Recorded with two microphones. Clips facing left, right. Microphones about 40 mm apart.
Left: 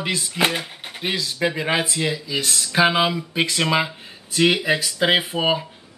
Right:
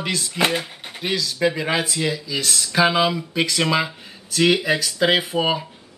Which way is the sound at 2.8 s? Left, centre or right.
Centre.